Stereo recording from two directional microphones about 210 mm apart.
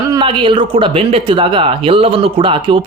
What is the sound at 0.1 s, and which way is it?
Speech, 25° right (ahead or behind).